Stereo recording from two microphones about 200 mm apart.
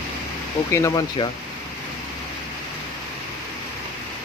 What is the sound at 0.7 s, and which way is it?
Speech, 15° left (ahead or behind).